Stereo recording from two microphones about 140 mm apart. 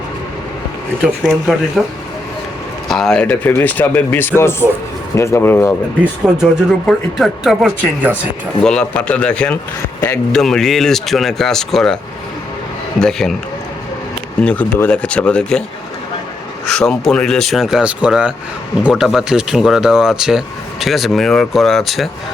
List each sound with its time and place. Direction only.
1.0 s speech: 5° right (ahead or behind)
2.9 s speech: 5° left (ahead or behind)
6.2 s speech: 5° right (ahead or behind)
13.0 s speech: 5° left (ahead or behind)
14.4 s speech: 10° left (ahead or behind)
16.6 s speech: centre (ahead or behind)